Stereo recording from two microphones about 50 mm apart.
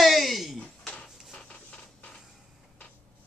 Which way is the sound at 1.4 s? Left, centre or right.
Left.